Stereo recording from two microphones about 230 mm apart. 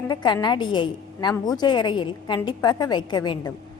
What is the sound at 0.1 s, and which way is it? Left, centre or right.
A woman's voice, centre.